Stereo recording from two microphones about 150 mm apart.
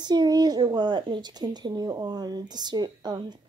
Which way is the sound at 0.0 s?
30° right (ahead or behind).